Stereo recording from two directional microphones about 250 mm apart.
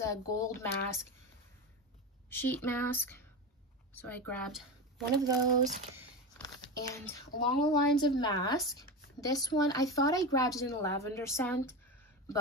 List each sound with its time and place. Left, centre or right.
0.0 s speech: centre
2.2 s speech: centre
5.2 s speech: centre
6.3 s speech: centre